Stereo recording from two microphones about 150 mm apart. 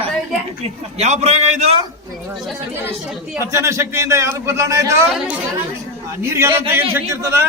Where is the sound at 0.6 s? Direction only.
45° right (ahead or behind).